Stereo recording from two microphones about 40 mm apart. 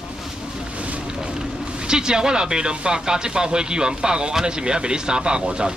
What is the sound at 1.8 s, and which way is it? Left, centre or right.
Speech, centre.